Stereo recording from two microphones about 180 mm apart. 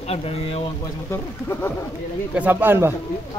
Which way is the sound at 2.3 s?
10° right (ahead or behind).